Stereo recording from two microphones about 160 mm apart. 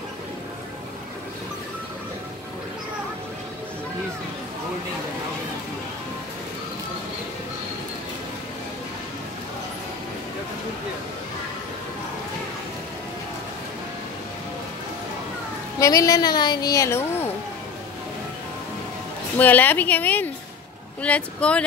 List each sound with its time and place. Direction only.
15.8 s a woman's voice: 20° left (ahead or behind)
19.3 s a woman's voice: 10° left (ahead or behind)